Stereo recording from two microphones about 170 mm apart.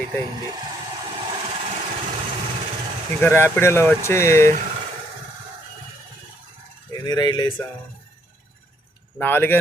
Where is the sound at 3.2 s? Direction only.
15° left (ahead or behind).